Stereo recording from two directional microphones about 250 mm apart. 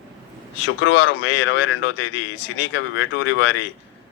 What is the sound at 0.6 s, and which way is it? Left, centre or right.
Speech, left.